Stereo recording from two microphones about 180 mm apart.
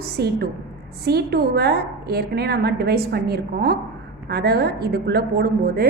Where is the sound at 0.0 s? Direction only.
60° right (ahead or behind).